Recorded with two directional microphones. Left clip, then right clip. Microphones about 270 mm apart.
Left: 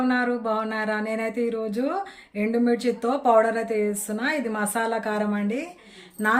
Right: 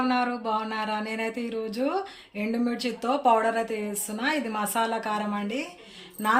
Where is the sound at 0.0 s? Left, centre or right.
Centre.